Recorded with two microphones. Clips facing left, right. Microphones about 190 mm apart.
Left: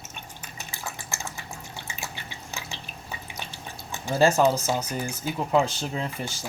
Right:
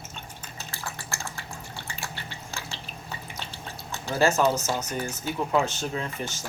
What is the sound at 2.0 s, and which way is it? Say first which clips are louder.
Drip: even; 15° left (ahead or behind).